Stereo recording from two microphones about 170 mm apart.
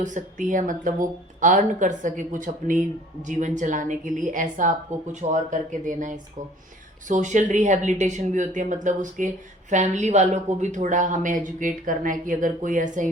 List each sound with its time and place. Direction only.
0.0 s speech: 50° right (ahead or behind)